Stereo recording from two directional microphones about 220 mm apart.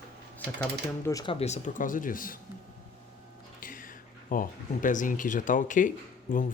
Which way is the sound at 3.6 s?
40° left (ahead or behind).